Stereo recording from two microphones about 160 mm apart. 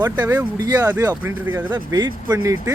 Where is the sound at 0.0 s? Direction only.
10° right (ahead or behind).